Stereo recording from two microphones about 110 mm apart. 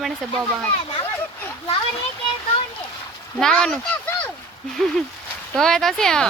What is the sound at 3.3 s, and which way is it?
Speech, 5° left (ahead or behind).